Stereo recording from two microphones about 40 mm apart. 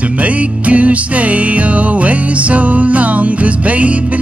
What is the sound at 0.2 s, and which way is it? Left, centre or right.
Music, right.